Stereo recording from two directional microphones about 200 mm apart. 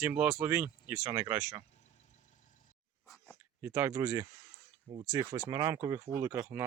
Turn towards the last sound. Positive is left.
turn(degrees=-10)  # may be behind; listen again after turning